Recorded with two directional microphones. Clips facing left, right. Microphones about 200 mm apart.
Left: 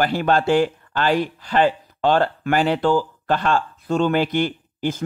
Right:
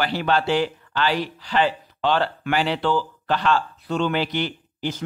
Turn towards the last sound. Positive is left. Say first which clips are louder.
# left 4 dB
turn(degrees=50)  # may be behind; listen again after turning